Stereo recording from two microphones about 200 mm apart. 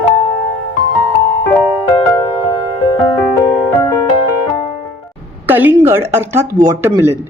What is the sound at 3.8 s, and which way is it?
Music, 20° left (ahead or behind).